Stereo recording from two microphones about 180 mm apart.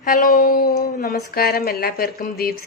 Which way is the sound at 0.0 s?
45° left (ahead or behind).